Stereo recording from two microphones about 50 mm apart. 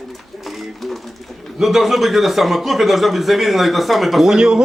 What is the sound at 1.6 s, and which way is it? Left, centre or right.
Speech, centre.